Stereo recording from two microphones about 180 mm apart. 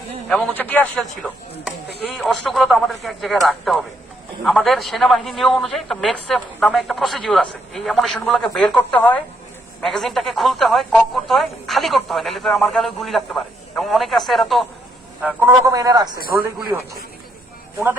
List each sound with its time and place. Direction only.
0.3 s a man's voice: 5° left (ahead or behind); by 16.1 s 20° right (ahead or behind)